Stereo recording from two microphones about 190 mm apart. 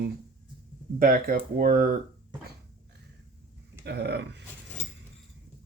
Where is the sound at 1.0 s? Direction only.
50° right (ahead or behind).